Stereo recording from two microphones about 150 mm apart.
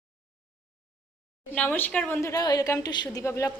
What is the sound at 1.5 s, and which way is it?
A woman's voice, 10° left (ahead or behind).